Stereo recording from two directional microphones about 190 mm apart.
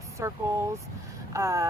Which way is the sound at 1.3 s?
15° right (ahead or behind).